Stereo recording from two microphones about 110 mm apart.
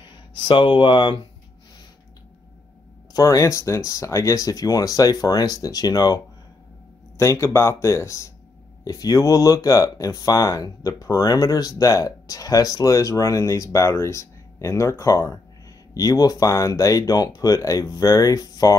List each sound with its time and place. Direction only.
0.0 s speech: 45° left (ahead or behind)
3.1 s speech: 30° left (ahead or behind)